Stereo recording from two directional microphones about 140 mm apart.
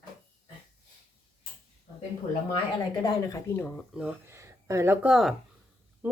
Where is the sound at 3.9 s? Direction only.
10° right (ahead or behind).